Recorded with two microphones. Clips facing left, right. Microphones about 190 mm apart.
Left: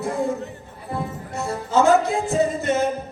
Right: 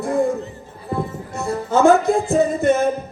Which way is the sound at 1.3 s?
55° right (ahead or behind).